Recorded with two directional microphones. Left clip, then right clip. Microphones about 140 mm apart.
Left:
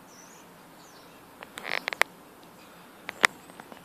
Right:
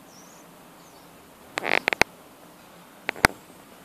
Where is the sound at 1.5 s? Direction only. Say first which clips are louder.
Right 9 dB; 20° right (ahead or behind).